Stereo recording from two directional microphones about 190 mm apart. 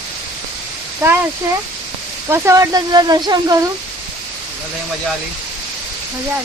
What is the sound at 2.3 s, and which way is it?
Speech, 15° right (ahead or behind).